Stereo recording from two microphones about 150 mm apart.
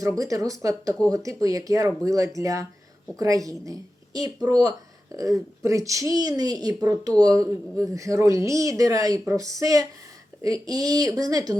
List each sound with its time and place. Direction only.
0.2 s a woman's voice: 20° right (ahead or behind)